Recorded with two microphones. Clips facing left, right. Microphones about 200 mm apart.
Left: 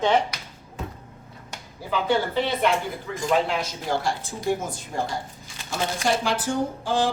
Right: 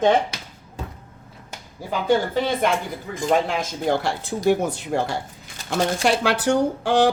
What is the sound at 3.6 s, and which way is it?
A woman's voice, 60° right (ahead or behind).